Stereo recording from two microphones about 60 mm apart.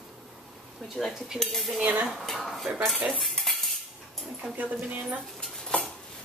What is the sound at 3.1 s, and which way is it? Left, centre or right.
Cutlery, centre.